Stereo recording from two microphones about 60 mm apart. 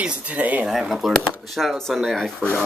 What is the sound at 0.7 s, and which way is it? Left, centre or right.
Speech, centre.